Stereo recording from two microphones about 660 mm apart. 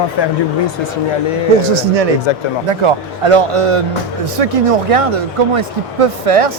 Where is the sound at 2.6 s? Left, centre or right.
Right.